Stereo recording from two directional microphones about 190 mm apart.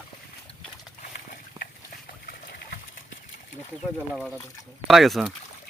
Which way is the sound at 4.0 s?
10° left (ahead or behind).